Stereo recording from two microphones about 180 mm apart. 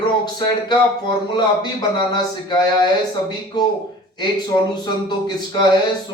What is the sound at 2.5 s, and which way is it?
Speech, 25° left (ahead or behind).